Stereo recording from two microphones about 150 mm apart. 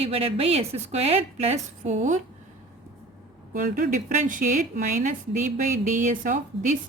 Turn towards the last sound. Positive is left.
turn(degrees=-60)  # may be behind; listen again after turning